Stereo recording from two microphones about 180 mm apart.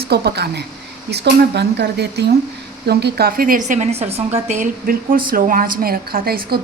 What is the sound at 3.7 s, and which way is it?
A woman's voice, 40° right (ahead or behind).